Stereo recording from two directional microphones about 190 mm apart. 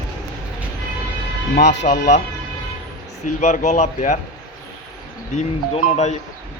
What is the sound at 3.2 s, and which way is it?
Speech, 40° left (ahead or behind).